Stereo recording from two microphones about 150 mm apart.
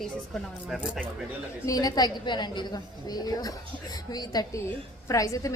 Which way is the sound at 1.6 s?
25° left (ahead or behind).